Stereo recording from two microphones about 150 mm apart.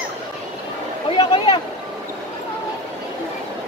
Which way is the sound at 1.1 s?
35° left (ahead or behind).